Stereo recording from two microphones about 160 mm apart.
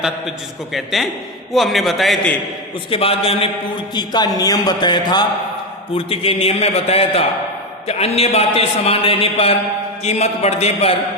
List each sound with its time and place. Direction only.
0.0 s a man's voice: centre (ahead or behind)
2.9 s a man's voice: 35° left (ahead or behind)